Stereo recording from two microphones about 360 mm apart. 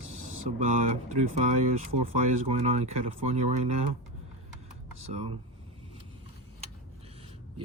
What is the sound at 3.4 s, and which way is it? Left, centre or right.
Speech, right.